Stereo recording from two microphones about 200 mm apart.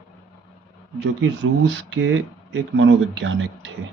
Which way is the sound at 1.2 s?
70° right (ahead or behind).